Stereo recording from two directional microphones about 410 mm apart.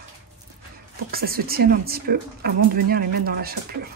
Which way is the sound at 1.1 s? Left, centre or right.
Right.